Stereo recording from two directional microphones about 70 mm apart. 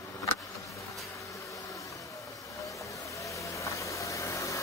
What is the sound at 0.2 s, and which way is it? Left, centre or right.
Vehicle, left.